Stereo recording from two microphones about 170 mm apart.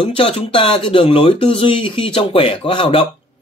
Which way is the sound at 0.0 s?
35° left (ahead or behind).